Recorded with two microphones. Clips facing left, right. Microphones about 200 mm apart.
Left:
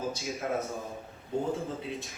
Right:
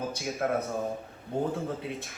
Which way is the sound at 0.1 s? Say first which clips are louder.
Right 2 dB; 65° right (ahead or behind).